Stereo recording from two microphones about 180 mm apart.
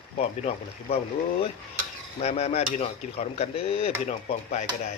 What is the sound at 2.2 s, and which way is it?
Dishes, 35° left (ahead or behind).